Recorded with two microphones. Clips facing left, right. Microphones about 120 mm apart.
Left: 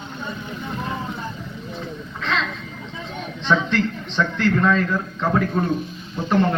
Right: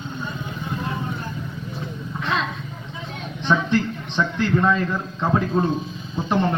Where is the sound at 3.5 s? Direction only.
15° right (ahead or behind).